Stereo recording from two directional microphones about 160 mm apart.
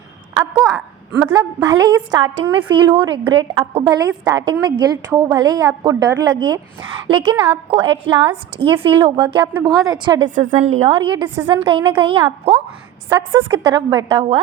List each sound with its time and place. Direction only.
0.7 s a woman's voice: 15° right (ahead or behind)
10.2 s a woman's voice: 50° right (ahead or behind)
10.8 s a woman's voice: 30° right (ahead or behind)